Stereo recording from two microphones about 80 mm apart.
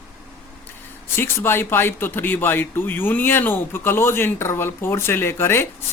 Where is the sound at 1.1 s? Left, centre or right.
Left.